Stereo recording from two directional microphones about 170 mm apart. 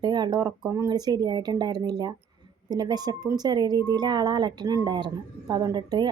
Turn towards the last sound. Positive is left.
turn(degrees=-25)  # may be behind; listen again after turning